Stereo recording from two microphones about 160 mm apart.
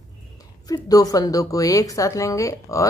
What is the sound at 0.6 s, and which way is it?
Speech, 25° left (ahead or behind).